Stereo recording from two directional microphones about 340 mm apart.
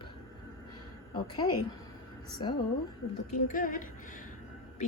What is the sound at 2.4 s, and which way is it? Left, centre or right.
A woman's voice, centre.